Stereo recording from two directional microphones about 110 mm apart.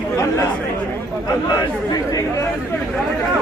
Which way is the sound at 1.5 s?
35° left (ahead or behind).